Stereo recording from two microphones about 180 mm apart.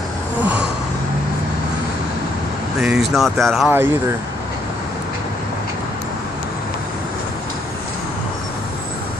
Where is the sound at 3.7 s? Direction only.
10° right (ahead or behind).